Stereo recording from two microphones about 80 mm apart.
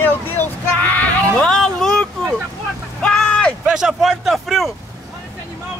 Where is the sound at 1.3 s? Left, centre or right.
Centre.